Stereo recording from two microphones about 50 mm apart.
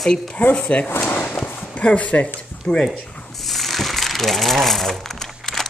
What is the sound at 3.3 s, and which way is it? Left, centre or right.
Ratchet, centre.